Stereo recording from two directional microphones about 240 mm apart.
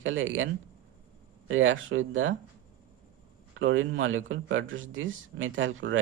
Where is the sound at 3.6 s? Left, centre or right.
Right.